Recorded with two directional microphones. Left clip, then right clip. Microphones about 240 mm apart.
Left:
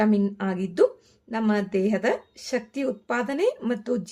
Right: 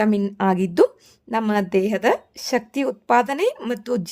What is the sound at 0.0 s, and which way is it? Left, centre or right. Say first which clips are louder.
Speech: right 4 dB; right.